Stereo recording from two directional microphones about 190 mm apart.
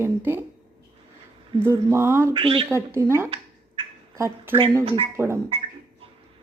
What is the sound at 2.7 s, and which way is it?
Speech, 15° right (ahead or behind).